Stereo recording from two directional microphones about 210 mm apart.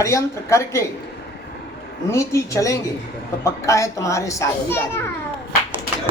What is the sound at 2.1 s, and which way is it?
A child's voice, 15° left (ahead or behind).